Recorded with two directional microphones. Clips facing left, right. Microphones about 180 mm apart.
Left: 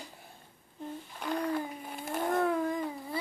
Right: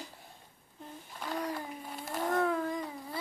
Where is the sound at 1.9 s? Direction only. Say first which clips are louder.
Even; 25° left (ahead or behind).